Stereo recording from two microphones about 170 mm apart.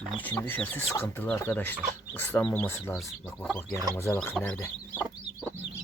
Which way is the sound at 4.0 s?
15° left (ahead or behind).